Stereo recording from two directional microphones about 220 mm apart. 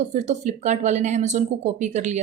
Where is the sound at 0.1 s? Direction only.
30° right (ahead or behind).